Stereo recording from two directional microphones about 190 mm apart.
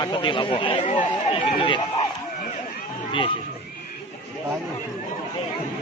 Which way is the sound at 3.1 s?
25° left (ahead or behind).